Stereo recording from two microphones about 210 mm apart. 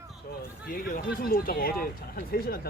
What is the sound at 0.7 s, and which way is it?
Speech, 40° left (ahead or behind).